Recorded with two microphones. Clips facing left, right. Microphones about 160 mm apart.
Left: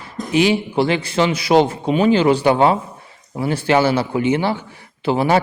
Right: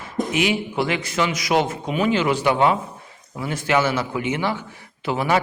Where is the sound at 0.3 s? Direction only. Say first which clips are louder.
Left 8 dB; 30° left (ahead or behind).